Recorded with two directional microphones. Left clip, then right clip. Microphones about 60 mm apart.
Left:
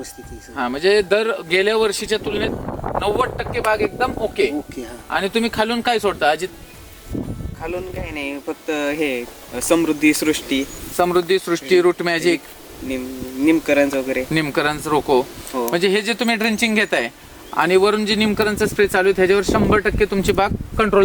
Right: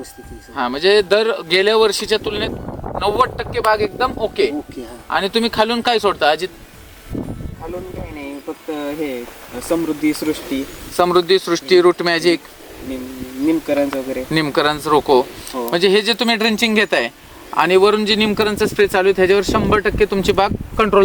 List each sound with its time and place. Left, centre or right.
0.5 s speech: centre
4.7 s speech: centre
5.1 s a man's voice: centre
7.6 s speech: centre
9.6 s speech: left
10.9 s speech: centre
13.4 s speech: centre
14.3 s a man's voice: centre